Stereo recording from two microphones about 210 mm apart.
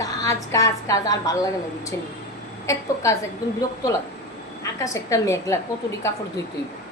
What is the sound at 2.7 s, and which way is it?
Speech, 15° left (ahead or behind).